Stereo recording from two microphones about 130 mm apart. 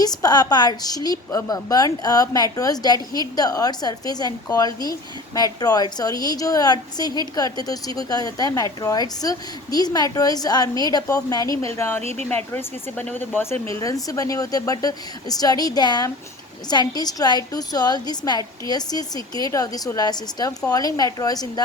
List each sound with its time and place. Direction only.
0.0 s a woman's voice: 30° left (ahead or behind)